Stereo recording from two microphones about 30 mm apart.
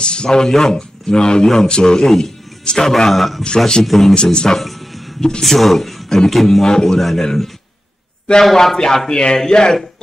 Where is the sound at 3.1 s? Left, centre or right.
Centre.